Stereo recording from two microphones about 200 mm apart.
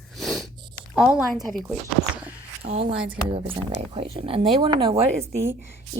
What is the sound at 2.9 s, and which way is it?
Speech, 5° right (ahead or behind).